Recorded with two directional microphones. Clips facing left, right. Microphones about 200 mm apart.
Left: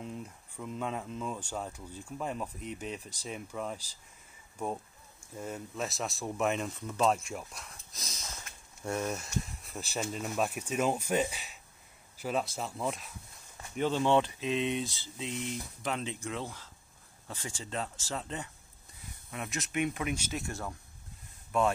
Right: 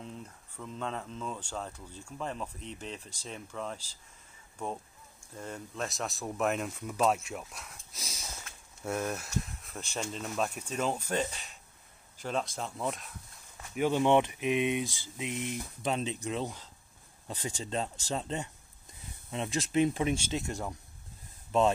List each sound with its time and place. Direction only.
0.0 s speech: 5° left (ahead or behind)
5.3 s speech: 5° left (ahead or behind)
13.7 s speech: 15° right (ahead or behind)